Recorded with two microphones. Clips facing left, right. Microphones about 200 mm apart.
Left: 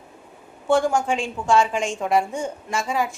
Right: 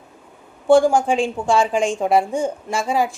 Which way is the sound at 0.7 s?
30° right (ahead or behind).